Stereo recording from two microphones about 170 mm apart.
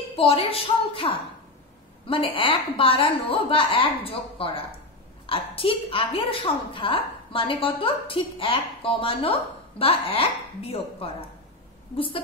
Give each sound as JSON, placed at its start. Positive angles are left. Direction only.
{"t": 0.1, "sound": "a woman's voice", "side_deg": 35}